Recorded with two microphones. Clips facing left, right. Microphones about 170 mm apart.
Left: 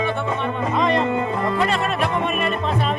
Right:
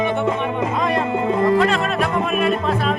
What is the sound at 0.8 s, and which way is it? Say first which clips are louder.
Speech: left 3 dB; 5° right (ahead or behind).